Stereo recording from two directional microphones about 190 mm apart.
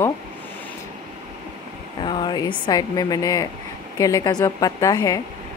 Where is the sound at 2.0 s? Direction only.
25° left (ahead or behind).